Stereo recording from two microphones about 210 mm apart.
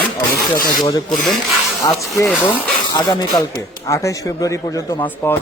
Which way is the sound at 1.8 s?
15° left (ahead or behind).